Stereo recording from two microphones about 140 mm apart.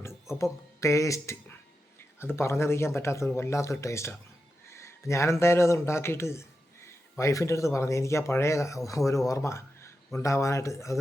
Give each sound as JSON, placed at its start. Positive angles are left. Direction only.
{"t": 0.3, "sound": "speech", "side_deg": 20}